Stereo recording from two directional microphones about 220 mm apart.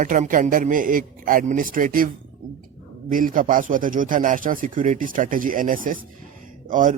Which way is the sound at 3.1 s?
40° right (ahead or behind).